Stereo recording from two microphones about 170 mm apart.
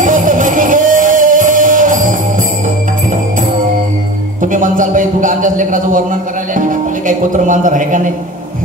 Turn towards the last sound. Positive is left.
turn(degrees=-50)  # may be behind; listen again after turning